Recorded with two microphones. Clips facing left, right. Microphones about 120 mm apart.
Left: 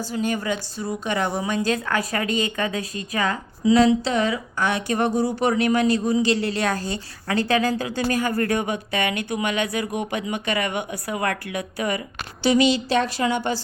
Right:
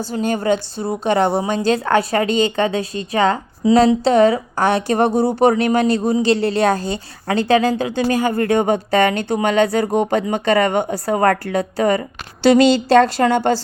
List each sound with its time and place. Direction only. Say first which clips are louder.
0.0 s a woman's voice: right 5 dB; 30° right (ahead or behind)
12.4 s a woman's voice: right 7 dB; 75° right (ahead or behind)